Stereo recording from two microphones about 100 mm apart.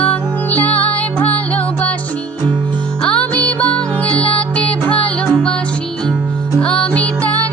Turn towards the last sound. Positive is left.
turn(degrees=15)  # may be behind; listen again after turning